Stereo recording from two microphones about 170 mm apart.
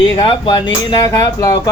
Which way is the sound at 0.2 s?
30° left (ahead or behind).